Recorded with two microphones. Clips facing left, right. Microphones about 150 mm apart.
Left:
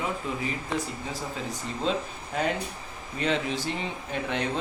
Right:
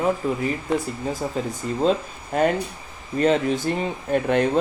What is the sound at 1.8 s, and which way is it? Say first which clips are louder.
Speech: right 8 dB; 45° right (ahead or behind).